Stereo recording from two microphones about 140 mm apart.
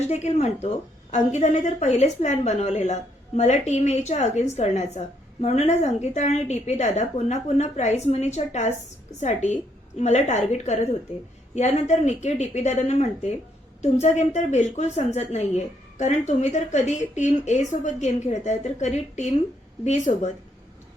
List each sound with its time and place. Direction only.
0.1 s a woman's voice: 50° left (ahead or behind)